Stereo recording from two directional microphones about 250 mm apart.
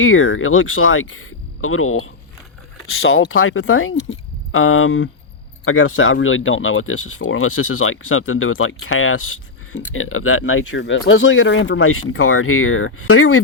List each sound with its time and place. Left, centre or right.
0.0 s speech: left